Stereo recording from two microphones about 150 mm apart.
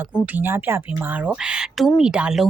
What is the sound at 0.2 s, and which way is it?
Speech, 15° right (ahead or behind).